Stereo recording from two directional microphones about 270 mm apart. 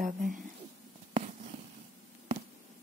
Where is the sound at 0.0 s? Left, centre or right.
Right.